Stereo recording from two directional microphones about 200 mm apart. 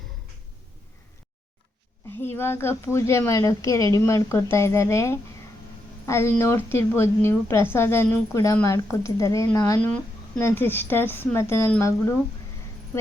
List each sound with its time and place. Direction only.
2.2 s a woman's voice: 10° left (ahead or behind)